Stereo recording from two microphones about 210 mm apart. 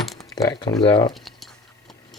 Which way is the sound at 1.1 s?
Centre (ahead or behind).